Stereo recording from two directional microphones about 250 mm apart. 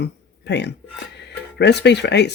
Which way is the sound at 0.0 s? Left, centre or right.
Left.